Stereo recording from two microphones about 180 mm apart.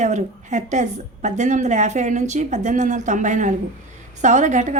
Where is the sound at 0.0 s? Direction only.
40° right (ahead or behind).